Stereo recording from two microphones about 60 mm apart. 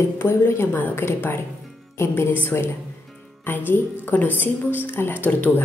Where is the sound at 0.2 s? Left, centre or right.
Left.